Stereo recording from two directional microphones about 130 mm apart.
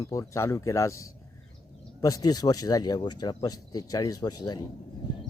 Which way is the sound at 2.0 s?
30° left (ahead or behind).